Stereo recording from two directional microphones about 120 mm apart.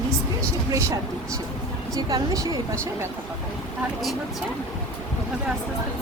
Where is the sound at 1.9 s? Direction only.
30° right (ahead or behind).